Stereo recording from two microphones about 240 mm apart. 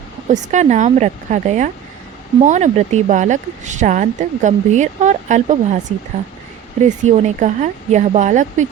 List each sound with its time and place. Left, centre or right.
0.3 s a woman's voice: right
6.8 s a woman's voice: right